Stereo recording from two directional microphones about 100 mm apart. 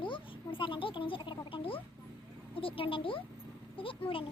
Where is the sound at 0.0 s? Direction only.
55° left (ahead or behind).